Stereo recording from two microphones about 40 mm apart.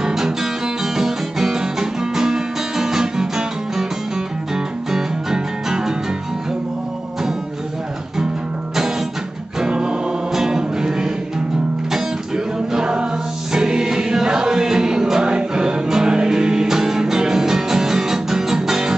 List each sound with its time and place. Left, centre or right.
0.0 s music: centre
4.9 s music: centre
9.6 s music: centre
12.7 s music: centre